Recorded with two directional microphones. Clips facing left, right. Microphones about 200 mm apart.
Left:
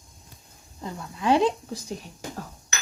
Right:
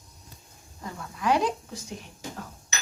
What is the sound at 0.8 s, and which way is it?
Speech, 25° left (ahead or behind).